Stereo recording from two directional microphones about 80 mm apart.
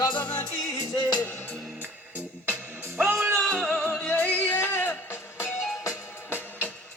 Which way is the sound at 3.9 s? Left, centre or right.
Centre.